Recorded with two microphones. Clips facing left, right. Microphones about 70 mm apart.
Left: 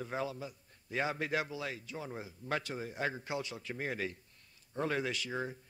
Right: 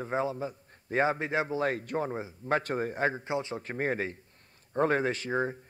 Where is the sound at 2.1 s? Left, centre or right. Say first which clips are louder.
Right 8 dB; right.